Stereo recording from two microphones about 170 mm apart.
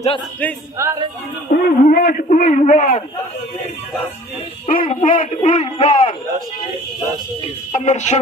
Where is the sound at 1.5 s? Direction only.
50° left (ahead or behind).